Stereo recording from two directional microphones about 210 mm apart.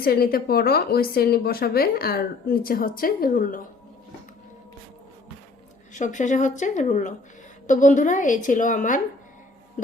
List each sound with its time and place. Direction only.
0.0 s speech: 45° left (ahead or behind)
5.9 s a woman's voice: 35° left (ahead or behind)